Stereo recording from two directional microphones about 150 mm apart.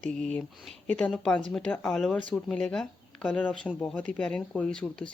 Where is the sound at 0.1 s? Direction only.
5° left (ahead or behind).